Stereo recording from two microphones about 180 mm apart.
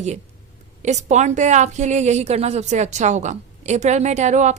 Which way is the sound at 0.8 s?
40° right (ahead or behind).